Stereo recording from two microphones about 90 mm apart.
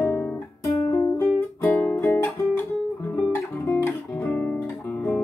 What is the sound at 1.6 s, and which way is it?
Music, 20° left (ahead or behind).